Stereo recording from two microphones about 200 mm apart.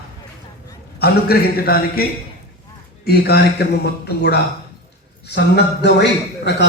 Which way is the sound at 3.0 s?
55° left (ahead or behind).